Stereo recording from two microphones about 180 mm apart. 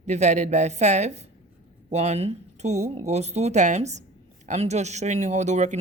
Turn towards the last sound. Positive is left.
turn(degrees=-40)  # may be behind; listen again after turning